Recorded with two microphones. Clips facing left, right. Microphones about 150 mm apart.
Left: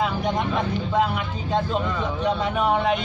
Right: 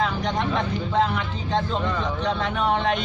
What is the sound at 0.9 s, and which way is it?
A man's voice, 10° left (ahead or behind).